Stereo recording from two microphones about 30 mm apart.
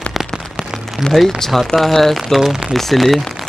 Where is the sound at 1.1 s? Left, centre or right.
Centre.